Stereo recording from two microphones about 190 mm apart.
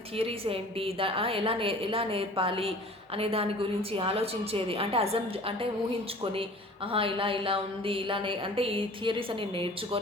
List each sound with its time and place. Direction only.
0.2 s a woman's voice: 30° right (ahead or behind)
6.9 s a woman's voice: 30° right (ahead or behind)